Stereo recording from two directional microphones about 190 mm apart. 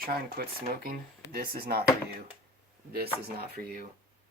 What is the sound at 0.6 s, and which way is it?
Speech, 50° right (ahead or behind).